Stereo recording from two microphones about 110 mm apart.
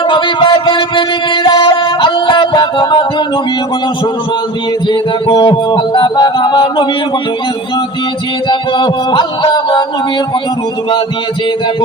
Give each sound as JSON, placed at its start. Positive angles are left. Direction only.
{"t": 0.0, "sound": "music", "side_deg": 50}
{"t": 4.9, "sound": "music", "side_deg": 45}
{"t": 8.4, "sound": "music", "side_deg": 45}